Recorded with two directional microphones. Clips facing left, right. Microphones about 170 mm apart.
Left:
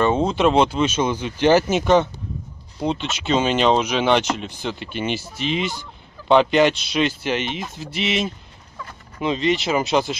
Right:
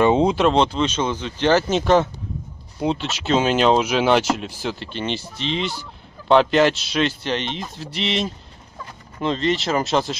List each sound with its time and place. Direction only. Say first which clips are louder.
0.0 s a sound: right 3 dB; 15° right (ahead or behind)
0.4 s speech: left 1 dB; 5° left (ahead or behind)
2.8 s speech: right 1 dB; 5° right (ahead or behind)
4.8 s speech: left 1 dB; 10° left (ahead or behind)